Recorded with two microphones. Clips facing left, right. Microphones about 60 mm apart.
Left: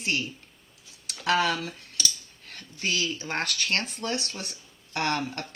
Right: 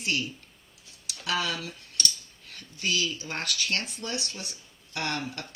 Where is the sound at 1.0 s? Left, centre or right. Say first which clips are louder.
Left 6 dB; left.